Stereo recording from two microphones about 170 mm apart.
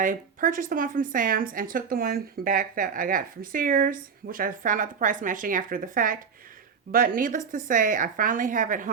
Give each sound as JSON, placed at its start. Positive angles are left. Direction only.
{"t": 0.0, "sound": "speech", "side_deg": -50}